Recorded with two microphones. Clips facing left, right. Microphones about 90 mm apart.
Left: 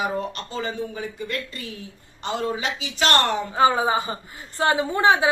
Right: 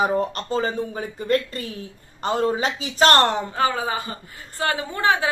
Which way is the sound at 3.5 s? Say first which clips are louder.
Left 4 dB; 20° left (ahead or behind).